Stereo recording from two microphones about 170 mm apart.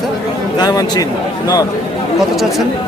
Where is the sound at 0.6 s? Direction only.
25° left (ahead or behind).